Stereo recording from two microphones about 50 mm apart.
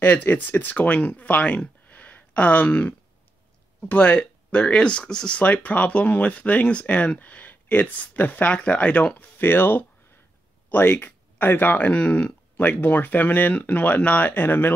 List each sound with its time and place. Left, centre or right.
0.0 s speech: left
1.9 s a sound: left
3.9 s speech: left
5.4 s speech: left
8.5 s speech: left
9.4 s speech: left
11.9 s speech: left